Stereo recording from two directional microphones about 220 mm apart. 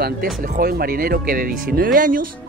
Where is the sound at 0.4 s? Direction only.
40° right (ahead or behind).